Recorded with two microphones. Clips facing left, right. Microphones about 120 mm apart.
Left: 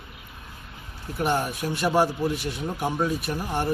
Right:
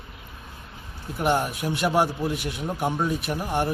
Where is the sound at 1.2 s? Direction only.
15° right (ahead or behind).